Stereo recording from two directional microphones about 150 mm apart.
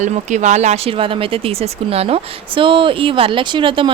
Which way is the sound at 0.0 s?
50° right (ahead or behind).